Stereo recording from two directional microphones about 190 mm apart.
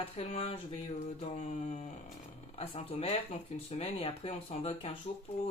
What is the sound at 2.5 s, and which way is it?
Speech, 30° left (ahead or behind).